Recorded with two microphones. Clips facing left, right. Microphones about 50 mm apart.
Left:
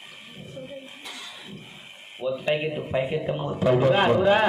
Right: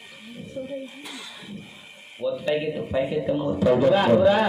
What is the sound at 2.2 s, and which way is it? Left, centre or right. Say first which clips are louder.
A man's voice: right 1 dB; left.